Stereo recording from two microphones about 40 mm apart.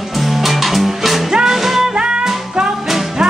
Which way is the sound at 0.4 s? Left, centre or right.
Centre.